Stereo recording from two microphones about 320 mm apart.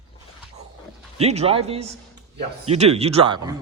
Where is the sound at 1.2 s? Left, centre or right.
Centre.